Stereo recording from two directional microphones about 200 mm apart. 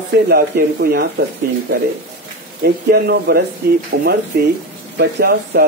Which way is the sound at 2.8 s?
50° right (ahead or behind).